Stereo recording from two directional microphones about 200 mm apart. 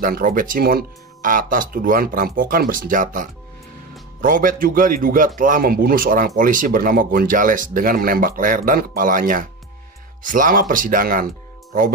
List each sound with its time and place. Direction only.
0.0 s a man's voice: 45° right (ahead or behind)